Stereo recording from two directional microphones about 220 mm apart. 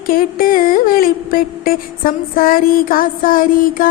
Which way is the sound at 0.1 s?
40° left (ahead or behind).